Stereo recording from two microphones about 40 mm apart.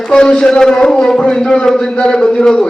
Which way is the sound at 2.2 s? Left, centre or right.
Left.